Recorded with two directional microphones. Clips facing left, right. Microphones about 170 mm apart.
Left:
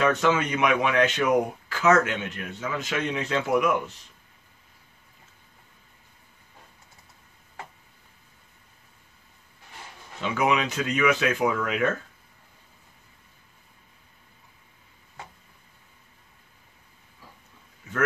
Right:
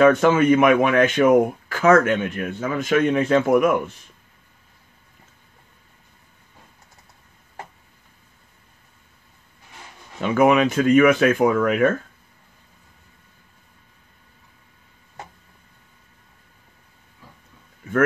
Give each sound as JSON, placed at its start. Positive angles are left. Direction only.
{"t": 0.0, "sound": "speech", "side_deg": -50}
{"t": 10.2, "sound": "speech", "side_deg": -50}
{"t": 17.8, "sound": "a sound", "side_deg": -55}